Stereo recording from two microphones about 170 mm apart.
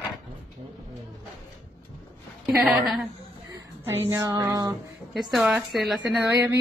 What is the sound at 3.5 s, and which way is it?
Speech, 15° right (ahead or behind).